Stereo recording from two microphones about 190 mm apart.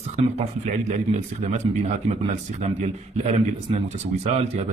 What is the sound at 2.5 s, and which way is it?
Speech, 35° right (ahead or behind).